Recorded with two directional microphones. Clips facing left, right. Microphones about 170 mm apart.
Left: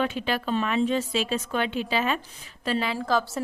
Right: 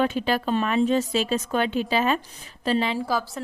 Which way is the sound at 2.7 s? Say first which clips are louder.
Right 3 dB; 25° right (ahead or behind).